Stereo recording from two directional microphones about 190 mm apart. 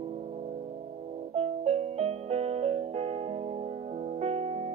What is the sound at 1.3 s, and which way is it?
Music, 35° right (ahead or behind).